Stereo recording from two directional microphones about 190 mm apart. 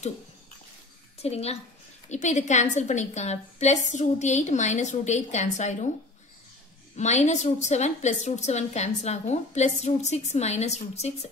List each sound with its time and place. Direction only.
1.2 s a woman's voice: 35° left (ahead or behind)
7.0 s a woman's voice: 35° left (ahead or behind)